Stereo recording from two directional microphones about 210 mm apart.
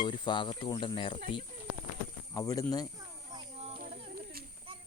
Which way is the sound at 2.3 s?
15° left (ahead or behind).